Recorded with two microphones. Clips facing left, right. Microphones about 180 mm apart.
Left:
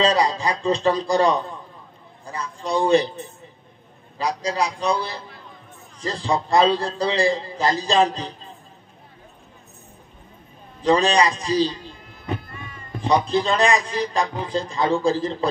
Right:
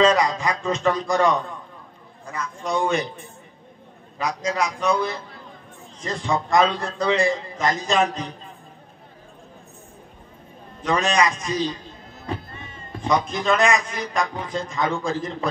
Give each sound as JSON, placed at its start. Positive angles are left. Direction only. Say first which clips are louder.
{"t": 0.0, "sound": "a man's voice", "louder": "right 1 dB", "side_deg": 35}
{"t": 4.2, "sound": "a man's voice", "louder": "left 1 dB", "side_deg": 35}
{"t": 10.8, "sound": "a man's voice", "louder": "left 3 dB", "side_deg": 35}
{"t": 12.4, "sound": "music", "louder": "left 1 dB", "side_deg": -25}
{"t": 13.0, "sound": "a man's voice", "louder": "left 3 dB", "side_deg": 35}